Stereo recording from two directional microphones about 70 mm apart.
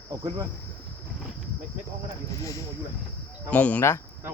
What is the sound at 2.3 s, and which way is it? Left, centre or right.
Speech, left.